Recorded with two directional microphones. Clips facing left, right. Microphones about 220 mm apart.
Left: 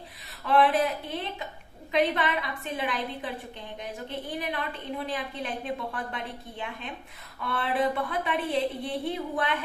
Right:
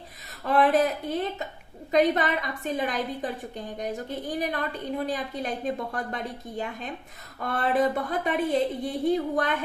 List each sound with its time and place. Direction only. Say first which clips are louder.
0.4 s a woman's voice: right 2 dB; 45° right (ahead or behind)